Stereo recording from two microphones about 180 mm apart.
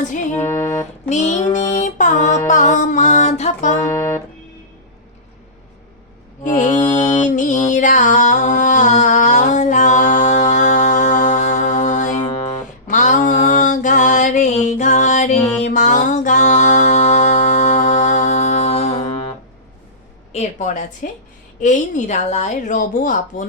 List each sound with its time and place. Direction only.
0.4 s music: 15° left (ahead or behind)
1.1 s music: 40° left (ahead or behind)
6.4 s music: 45° left (ahead or behind)
12.5 s a sound: 40° left (ahead or behind)
20.3 s a sound: 40° left (ahead or behind)
21.6 s speech: 45° left (ahead or behind)